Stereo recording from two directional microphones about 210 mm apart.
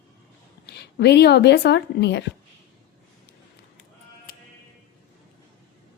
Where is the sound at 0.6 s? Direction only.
50° left (ahead or behind).